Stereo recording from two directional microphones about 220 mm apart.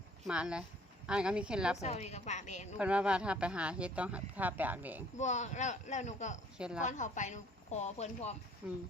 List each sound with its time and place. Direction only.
0.3 s speech: 5° right (ahead or behind)
1.8 s speech: 30° left (ahead or behind)
2.7 s speech: 5° right (ahead or behind)
5.1 s speech: 30° left (ahead or behind)
6.6 s speech: 5° right (ahead or behind)
6.8 s speech: 35° left (ahead or behind)
8.6 s speech: 5° right (ahead or behind)